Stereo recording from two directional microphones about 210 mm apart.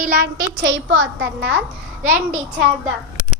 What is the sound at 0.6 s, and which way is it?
A child's voice, 55° right (ahead or behind).